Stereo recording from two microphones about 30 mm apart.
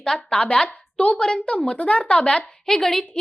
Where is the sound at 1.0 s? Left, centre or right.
Left.